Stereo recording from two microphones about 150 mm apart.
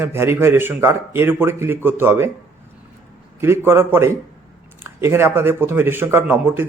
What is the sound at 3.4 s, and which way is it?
A man's voice, 15° right (ahead or behind).